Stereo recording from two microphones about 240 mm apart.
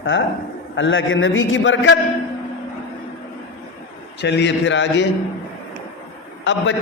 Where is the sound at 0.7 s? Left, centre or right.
Left.